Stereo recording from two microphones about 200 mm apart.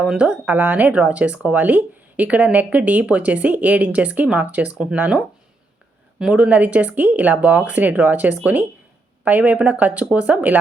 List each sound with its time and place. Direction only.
0.0 s speech: 5° right (ahead or behind)